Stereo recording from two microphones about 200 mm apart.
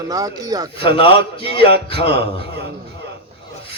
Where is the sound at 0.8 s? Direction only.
25° left (ahead or behind).